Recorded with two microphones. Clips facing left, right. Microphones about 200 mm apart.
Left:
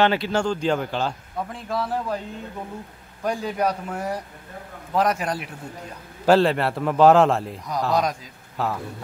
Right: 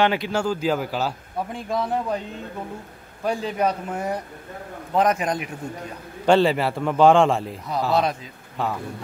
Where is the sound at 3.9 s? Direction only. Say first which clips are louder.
Right 1 dB; 10° right (ahead or behind).